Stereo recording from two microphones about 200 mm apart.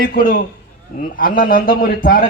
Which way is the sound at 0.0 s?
45° left (ahead or behind).